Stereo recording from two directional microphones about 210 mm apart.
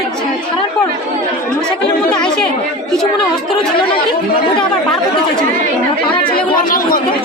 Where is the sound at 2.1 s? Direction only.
5° left (ahead or behind).